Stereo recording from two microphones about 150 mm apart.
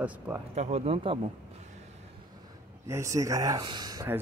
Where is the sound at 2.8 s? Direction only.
20° right (ahead or behind).